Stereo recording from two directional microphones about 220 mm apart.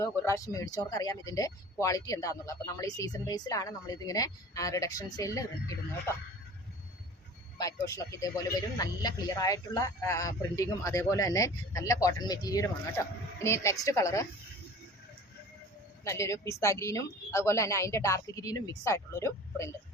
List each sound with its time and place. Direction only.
0.0 s speech: 15° left (ahead or behind)
7.6 s speech: 15° left (ahead or behind)
16.0 s speech: 15° left (ahead or behind)